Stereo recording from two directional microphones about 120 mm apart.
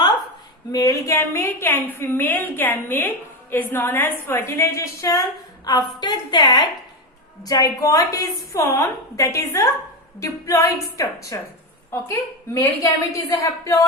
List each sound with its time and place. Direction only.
0.7 s a woman's voice: 30° left (ahead or behind)